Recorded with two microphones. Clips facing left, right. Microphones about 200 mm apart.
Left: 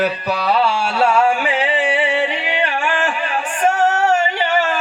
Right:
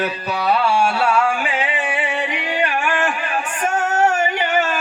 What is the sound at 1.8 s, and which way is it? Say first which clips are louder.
Music: left 5 dB; 25° left (ahead or behind).